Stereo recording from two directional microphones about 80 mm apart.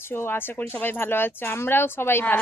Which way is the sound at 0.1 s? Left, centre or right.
Left.